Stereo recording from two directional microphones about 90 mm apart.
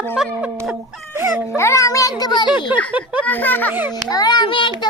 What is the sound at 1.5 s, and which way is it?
Speech, 30° left (ahead or behind).